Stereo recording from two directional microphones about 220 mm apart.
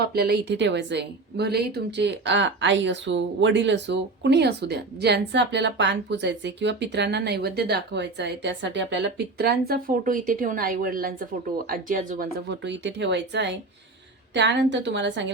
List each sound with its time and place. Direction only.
0.0 s a woman's voice: 45° right (ahead or behind)